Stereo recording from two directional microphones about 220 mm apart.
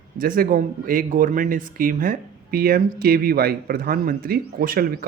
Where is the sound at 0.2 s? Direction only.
40° right (ahead or behind).